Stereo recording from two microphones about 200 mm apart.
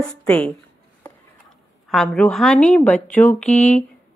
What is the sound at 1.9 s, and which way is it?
A woman's voice, 5° left (ahead or behind).